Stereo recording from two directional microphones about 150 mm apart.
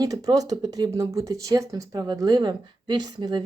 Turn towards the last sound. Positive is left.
turn(degrees=-30)  # may be behind; listen again after turning